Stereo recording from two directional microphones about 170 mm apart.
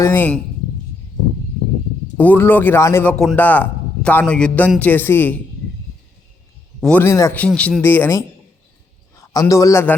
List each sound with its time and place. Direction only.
0.0 s speech: 10° left (ahead or behind)
2.1 s a man's voice: 10° left (ahead or behind)
6.7 s a man's voice: 5° left (ahead or behind)
7.0 s a man's voice: 15° left (ahead or behind)